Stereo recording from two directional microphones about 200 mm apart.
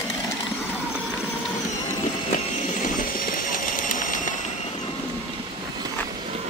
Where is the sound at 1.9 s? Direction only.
40° left (ahead or behind).